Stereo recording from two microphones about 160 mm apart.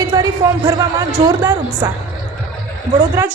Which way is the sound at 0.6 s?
20° right (ahead or behind).